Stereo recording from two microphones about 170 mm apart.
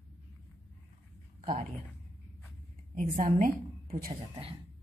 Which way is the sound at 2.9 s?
50° right (ahead or behind).